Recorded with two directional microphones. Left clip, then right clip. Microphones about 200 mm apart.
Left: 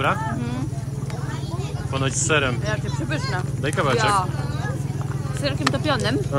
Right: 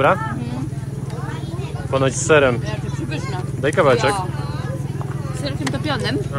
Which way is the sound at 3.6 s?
10° left (ahead or behind).